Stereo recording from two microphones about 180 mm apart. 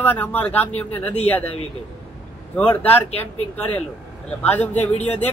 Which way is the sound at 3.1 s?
35° left (ahead or behind).